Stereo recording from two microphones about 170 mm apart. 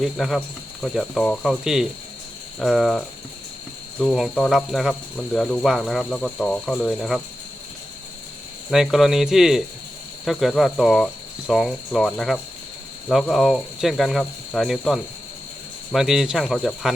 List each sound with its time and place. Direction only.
0.0 s speech: centre (ahead or behind)
4.0 s speech: centre (ahead or behind)
8.7 s speech: centre (ahead or behind)